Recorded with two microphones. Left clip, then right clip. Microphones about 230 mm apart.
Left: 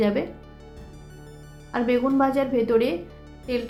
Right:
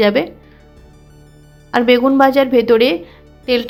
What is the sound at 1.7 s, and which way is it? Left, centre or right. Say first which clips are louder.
A woman's voice: right 11 dB; right.